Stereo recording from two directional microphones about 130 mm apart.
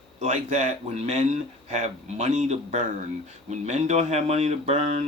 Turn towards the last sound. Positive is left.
turn(degrees=-55)  # may be behind; listen again after turning